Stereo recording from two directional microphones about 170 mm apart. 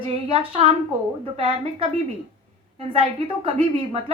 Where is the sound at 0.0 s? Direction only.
35° right (ahead or behind).